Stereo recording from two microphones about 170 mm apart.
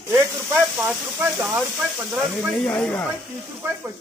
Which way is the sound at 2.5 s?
5° left (ahead or behind).